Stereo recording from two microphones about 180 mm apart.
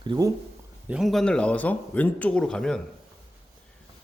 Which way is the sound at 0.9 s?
Centre (ahead or behind).